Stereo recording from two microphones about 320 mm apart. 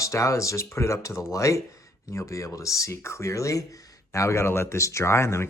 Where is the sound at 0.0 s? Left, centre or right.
Centre.